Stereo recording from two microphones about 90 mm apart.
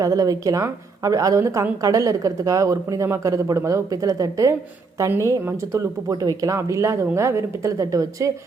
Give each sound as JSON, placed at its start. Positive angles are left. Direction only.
{"t": 0.0, "sound": "a woman's voice", "side_deg": -40}